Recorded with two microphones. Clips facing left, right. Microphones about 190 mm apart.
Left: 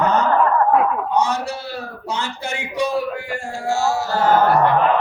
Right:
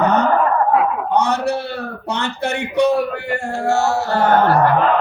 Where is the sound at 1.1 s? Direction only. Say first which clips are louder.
Right 3 dB; 60° right (ahead or behind).